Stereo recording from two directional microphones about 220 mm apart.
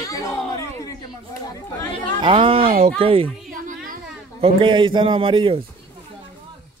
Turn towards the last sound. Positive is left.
turn(degrees=-25)  # may be behind; listen again after turning